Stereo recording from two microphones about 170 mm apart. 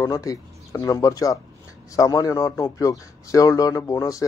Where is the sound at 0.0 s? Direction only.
20° left (ahead or behind).